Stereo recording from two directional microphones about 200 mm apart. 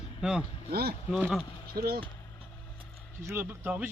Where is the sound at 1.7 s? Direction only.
50° right (ahead or behind).